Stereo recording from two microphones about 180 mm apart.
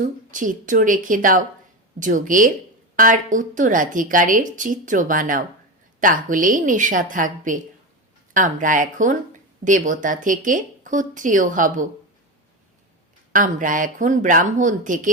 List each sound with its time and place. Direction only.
0.0 s a woman's voice: 45° right (ahead or behind)
13.3 s a woman's voice: 45° right (ahead or behind)